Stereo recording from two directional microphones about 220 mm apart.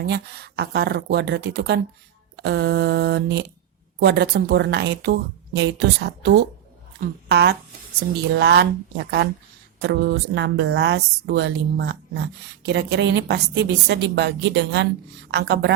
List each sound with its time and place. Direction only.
0.0 s a woman's voice: 50° right (ahead or behind)